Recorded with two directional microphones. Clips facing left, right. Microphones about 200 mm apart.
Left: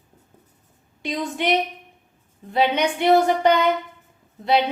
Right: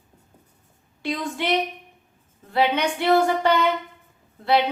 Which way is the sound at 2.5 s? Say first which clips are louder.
Left 1 dB; 20° left (ahead or behind).